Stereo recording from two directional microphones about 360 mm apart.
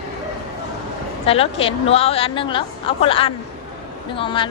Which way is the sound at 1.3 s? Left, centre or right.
Centre.